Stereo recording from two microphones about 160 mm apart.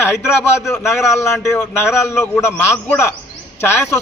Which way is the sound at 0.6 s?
20° left (ahead or behind).